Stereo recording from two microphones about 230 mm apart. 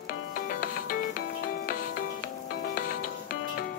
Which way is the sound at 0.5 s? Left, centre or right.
Left.